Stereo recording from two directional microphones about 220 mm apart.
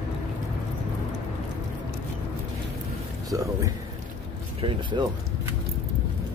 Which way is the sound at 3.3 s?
15° right (ahead or behind).